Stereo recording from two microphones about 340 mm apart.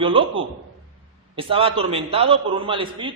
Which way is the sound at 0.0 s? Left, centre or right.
Centre.